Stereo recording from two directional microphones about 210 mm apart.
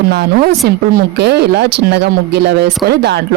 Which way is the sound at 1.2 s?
50° right (ahead or behind).